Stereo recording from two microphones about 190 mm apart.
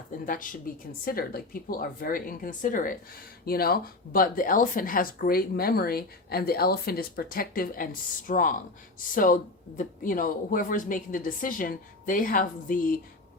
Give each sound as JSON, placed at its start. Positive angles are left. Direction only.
{"t": 0.3, "sound": "speech", "side_deg": 45}